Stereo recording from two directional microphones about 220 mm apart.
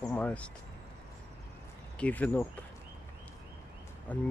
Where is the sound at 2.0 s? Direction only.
5° left (ahead or behind).